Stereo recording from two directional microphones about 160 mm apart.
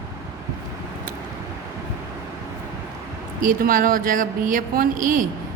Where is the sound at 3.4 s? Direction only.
60° right (ahead or behind).